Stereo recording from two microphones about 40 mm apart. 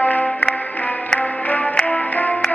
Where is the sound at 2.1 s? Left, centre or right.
Left.